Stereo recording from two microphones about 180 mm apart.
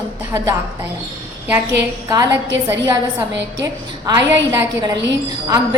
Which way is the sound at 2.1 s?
20° right (ahead or behind).